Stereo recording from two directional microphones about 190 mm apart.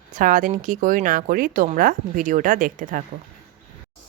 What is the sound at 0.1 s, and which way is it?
Speech, 45° right (ahead or behind).